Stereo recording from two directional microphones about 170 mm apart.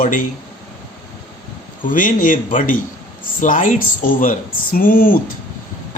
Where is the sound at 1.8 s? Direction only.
50° left (ahead or behind).